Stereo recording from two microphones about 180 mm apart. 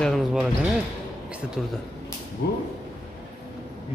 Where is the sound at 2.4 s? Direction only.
70° left (ahead or behind).